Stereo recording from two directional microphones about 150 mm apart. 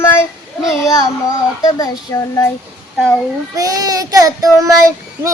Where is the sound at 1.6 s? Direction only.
20° left (ahead or behind).